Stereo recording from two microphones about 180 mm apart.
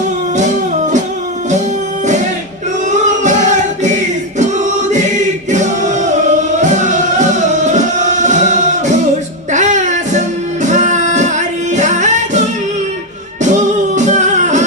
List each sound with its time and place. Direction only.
2.9 s a sound: 40° right (ahead or behind)
4.4 s choir: 40° right (ahead or behind)
6.6 s music: 40° right (ahead or behind)
13.4 s music: 40° right (ahead or behind)